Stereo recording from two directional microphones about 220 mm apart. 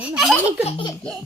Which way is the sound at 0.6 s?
25° left (ahead or behind).